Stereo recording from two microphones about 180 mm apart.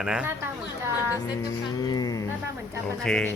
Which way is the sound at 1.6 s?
20° left (ahead or behind).